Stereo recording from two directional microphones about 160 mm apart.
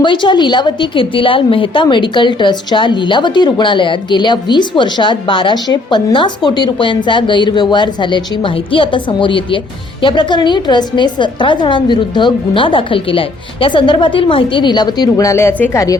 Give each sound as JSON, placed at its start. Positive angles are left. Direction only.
{"t": 0.0, "sound": "a woman's voice", "side_deg": 30}